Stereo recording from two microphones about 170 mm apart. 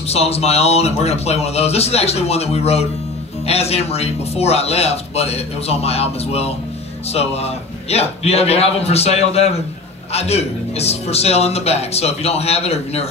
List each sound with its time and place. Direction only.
0.1 s speech: 35° left (ahead or behind)